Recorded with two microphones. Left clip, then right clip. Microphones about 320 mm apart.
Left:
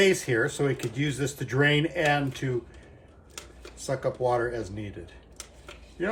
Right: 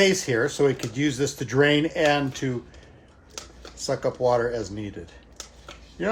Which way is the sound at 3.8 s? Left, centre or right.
Right.